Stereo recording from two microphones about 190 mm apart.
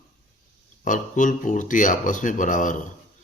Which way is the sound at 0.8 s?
45° left (ahead or behind).